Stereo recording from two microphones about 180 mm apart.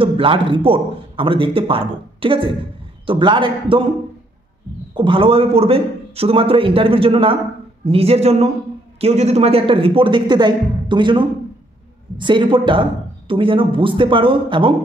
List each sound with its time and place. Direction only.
0.0 s a man's voice: 30° right (ahead or behind)
4.9 s a man's voice: 25° right (ahead or behind)